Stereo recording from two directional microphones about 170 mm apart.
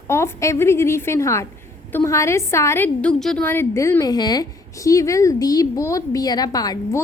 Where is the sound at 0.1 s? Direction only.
15° left (ahead or behind).